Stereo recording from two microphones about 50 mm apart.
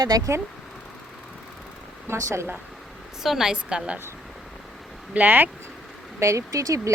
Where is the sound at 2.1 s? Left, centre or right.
Right.